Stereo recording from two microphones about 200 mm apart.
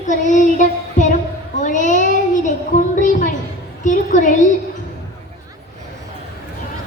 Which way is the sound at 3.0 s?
40° left (ahead or behind).